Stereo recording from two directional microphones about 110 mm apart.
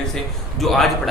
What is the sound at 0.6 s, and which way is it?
Speech, centre (ahead or behind).